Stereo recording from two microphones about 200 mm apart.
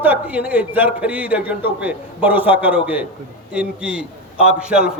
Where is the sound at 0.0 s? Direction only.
10° right (ahead or behind).